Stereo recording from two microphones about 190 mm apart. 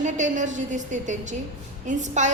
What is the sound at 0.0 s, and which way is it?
A woman's voice, 40° right (ahead or behind).